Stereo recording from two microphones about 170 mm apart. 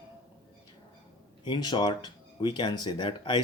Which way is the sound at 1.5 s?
25° left (ahead or behind).